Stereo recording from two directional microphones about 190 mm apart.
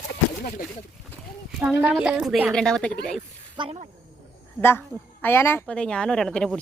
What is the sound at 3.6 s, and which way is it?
Speech, 30° right (ahead or behind).